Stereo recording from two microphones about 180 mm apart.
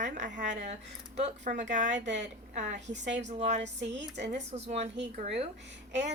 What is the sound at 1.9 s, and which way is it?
Speech, 80° right.